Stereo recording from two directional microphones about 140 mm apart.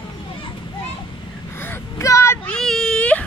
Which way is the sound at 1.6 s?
20° left (ahead or behind).